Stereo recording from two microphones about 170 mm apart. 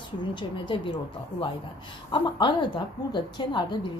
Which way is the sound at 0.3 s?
30° left (ahead or behind).